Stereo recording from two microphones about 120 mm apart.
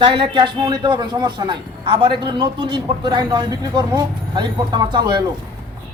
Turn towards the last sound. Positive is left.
turn(degrees=-40)  # may be behind; listen again after turning